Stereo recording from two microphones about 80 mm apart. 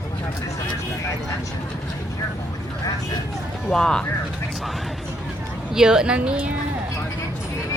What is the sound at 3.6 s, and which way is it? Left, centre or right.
Speech, centre.